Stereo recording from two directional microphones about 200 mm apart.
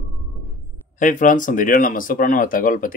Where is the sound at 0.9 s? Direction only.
40° left (ahead or behind).